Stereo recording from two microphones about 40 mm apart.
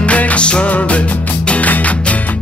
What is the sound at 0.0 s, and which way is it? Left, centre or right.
Music, left.